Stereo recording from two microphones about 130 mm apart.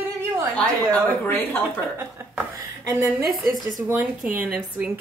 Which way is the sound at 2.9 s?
20° right (ahead or behind).